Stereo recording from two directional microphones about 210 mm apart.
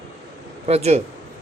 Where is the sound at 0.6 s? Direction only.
30° right (ahead or behind).